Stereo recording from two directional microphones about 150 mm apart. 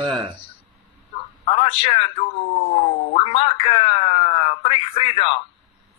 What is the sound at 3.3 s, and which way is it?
Speech, 40° left (ahead or behind).